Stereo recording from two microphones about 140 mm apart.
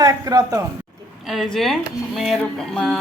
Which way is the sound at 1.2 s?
Centre (ahead or behind).